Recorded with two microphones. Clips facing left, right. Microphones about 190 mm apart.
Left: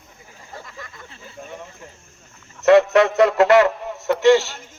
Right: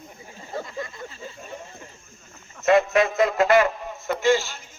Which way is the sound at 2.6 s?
75° left (ahead or behind).